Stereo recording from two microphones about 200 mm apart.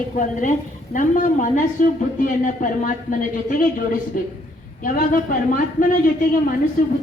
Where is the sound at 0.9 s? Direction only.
40° left (ahead or behind).